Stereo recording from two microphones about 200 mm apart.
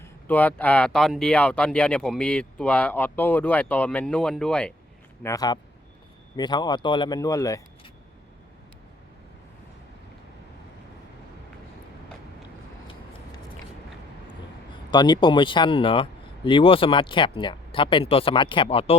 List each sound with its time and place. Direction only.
0.0 s speech: 10° left (ahead or behind)
5.2 s a man's voice: 20° left (ahead or behind)
14.8 s speech: 20° left (ahead or behind)